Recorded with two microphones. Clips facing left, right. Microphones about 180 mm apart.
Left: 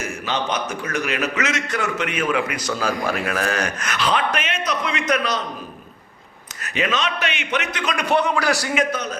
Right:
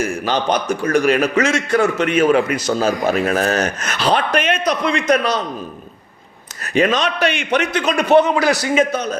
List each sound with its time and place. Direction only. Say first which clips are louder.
0.3 s a man's voice: right 4 dB; 35° right (ahead or behind)
6.7 s a man's voice: right 7 dB; 40° right (ahead or behind)